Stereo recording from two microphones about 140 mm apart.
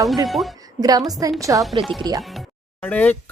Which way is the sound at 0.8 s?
25° right (ahead or behind).